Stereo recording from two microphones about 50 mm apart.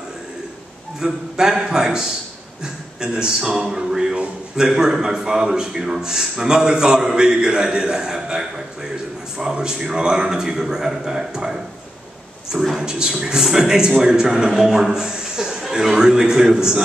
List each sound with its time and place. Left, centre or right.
0.9 s a man's voice: centre